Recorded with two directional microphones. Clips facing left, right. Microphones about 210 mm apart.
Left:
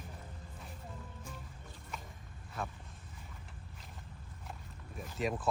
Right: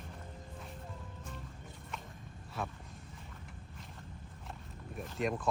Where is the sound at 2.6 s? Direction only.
Centre (ahead or behind).